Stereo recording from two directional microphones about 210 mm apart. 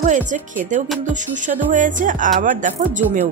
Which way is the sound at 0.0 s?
35° right (ahead or behind).